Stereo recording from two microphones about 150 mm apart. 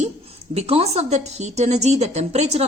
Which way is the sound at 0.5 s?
40° right (ahead or behind).